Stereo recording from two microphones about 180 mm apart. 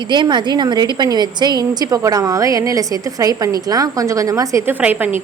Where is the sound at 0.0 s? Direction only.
25° right (ahead or behind).